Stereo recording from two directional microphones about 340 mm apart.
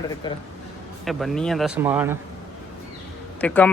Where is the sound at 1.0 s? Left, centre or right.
Centre.